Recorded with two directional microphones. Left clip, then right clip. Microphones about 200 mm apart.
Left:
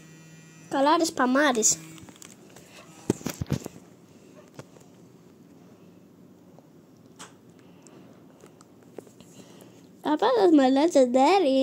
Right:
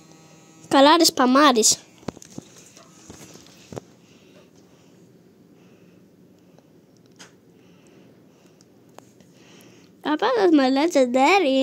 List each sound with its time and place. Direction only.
0.7 s speech: 50° right (ahead or behind)
1.1 s speech: 30° right (ahead or behind)
10.0 s a woman's voice: 10° right (ahead or behind)